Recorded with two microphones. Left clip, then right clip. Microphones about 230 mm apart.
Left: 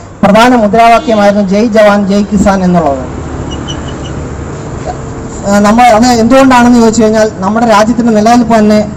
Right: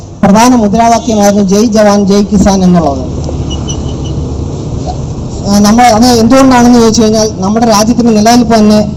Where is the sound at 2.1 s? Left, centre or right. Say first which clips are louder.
Right 1 dB; left.